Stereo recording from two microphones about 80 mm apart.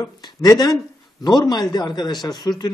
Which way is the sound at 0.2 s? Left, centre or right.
Left.